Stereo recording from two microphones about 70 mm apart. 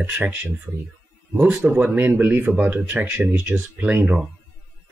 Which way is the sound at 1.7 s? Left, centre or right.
Right.